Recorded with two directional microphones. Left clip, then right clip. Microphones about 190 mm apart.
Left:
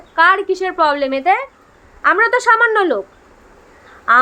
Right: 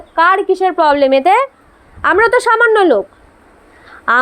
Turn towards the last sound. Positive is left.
turn(degrees=-40)  # may be behind; listen again after turning